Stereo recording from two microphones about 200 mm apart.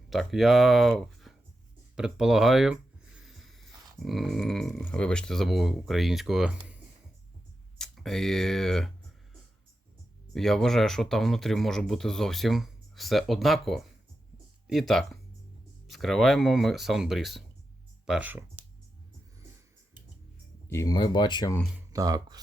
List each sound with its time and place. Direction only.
0.1 s speech: centre (ahead or behind)
3.2 s a sound: centre (ahead or behind)
7.8 s speech: centre (ahead or behind)
10.3 s speech: centre (ahead or behind)
20.7 s speech: 15° left (ahead or behind)
21.9 s speech: 20° right (ahead or behind)